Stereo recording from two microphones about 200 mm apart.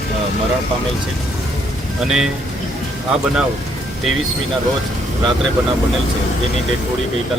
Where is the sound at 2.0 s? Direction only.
Centre (ahead or behind).